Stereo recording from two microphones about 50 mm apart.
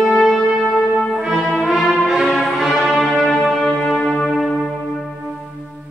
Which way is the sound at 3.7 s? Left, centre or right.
Centre.